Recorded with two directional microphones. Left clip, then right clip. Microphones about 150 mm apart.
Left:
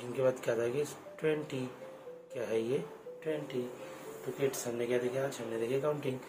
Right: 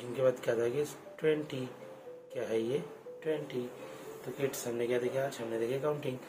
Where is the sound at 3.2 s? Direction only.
15° right (ahead or behind).